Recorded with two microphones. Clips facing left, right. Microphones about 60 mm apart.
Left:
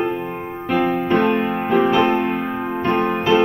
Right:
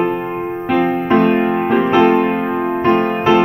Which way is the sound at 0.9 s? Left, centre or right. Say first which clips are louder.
Right 4 dB; right.